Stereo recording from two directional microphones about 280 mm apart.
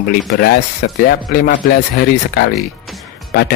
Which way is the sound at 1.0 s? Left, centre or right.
Left.